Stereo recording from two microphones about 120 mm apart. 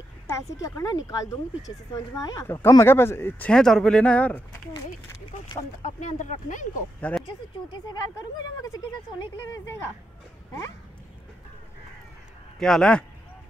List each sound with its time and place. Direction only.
0.3 s speech: 25° left (ahead or behind); by 4.4 s 10° left (ahead or behind)
5.8 s speech: 90° left
7.1 s speech: 10° left (ahead or behind)
8.6 s speech: 30° left (ahead or behind)
12.5 s a man's voice: 5° left (ahead or behind)